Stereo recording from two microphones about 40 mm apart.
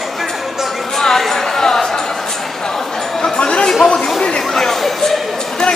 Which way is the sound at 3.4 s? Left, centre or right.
Left.